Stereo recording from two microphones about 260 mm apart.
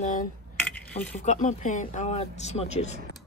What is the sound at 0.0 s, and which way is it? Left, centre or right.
Cutlery, left.